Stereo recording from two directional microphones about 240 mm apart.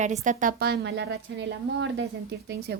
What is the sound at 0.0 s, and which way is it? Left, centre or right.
A woman's voice, right.